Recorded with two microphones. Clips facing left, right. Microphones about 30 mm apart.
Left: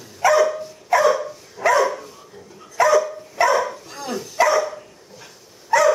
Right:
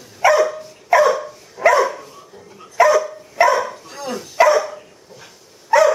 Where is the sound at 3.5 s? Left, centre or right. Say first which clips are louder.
Right 1 dB; centre.